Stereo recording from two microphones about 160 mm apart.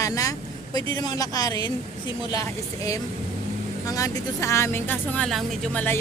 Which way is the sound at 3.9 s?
20° left (ahead or behind).